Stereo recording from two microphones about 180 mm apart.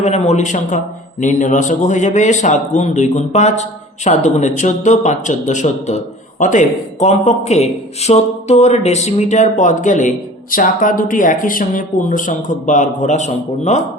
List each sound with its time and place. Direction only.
0.0 s a man's voice: 40° left (ahead or behind)